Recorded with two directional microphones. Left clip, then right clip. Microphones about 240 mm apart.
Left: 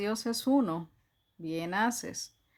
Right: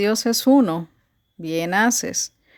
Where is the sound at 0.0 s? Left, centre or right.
Right.